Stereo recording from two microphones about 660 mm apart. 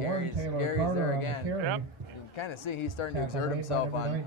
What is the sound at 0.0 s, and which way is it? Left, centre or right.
Speech, left.